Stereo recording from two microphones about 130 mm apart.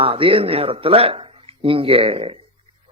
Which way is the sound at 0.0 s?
45° right (ahead or behind).